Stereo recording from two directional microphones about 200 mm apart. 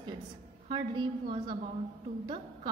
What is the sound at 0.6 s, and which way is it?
A woman's voice, 20° right (ahead or behind).